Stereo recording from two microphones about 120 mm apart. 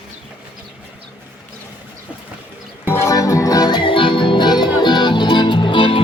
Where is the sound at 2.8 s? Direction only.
25° left (ahead or behind).